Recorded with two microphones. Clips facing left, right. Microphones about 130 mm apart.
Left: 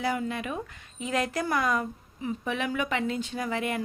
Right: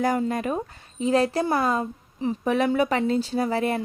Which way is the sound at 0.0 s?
40° right (ahead or behind).